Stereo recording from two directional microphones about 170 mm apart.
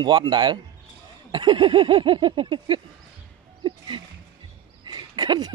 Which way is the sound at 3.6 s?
30° right (ahead or behind).